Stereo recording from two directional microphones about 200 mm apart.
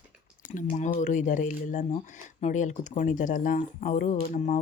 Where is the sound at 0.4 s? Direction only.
40° left (ahead or behind).